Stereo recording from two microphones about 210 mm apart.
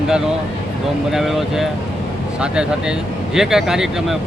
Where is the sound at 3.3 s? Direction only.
Centre (ahead or behind).